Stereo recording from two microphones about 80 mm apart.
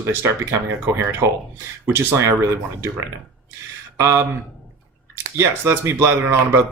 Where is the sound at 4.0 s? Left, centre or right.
Right.